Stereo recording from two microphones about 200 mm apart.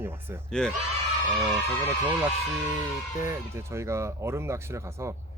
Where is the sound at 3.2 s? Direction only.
15° right (ahead or behind).